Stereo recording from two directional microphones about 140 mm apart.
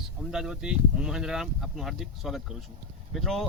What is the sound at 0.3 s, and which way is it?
Speech, 5° right (ahead or behind).